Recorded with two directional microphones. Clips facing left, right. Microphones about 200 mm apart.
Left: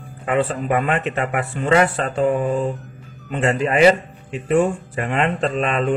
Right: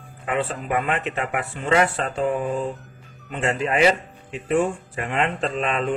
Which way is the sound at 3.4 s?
50° left (ahead or behind).